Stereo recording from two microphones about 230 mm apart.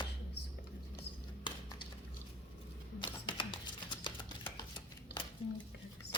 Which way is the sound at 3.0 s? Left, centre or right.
Left.